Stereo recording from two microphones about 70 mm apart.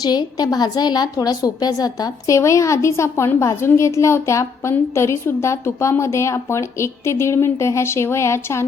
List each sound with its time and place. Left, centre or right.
0.0 s a woman's voice: left
1.1 s a woman's voice: left